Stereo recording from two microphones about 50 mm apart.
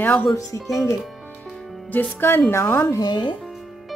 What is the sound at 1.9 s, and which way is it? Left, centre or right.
Speech, left.